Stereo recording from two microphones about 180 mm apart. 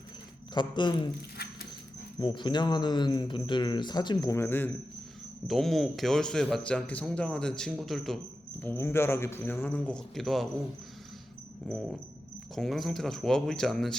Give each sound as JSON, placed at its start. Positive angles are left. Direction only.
{"t": 0.5, "sound": "speech", "side_deg": 25}
{"t": 1.4, "sound": "dog", "side_deg": 60}
{"t": 2.1, "sound": "speech", "side_deg": 25}
{"t": 5.5, "sound": "a man's voice", "side_deg": 0}
{"t": 8.6, "sound": "a man's voice", "side_deg": 15}
{"t": 12.5, "sound": "a man's voice", "side_deg": 0}